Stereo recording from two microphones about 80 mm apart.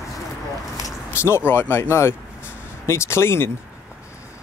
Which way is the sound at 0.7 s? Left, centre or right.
Left.